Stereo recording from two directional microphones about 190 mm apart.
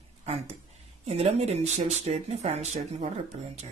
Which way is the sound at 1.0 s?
35° right (ahead or behind).